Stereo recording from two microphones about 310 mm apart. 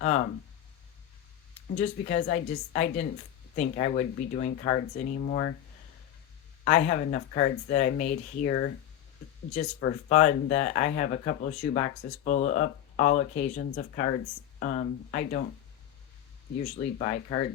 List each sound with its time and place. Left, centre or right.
1.7 s speech: left
6.7 s speech: left
16.6 s speech: left